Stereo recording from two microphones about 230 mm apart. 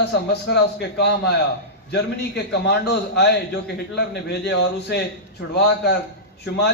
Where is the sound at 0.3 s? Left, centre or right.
Left.